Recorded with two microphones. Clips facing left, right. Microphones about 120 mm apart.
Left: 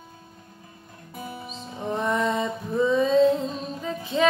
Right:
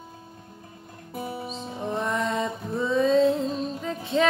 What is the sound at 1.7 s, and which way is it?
Mantra, centre (ahead or behind).